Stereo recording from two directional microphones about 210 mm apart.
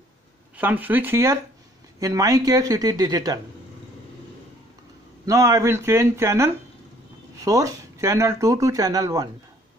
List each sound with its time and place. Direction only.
0.6 s speech: 10° right (ahead or behind)
5.2 s speech: 15° right (ahead or behind)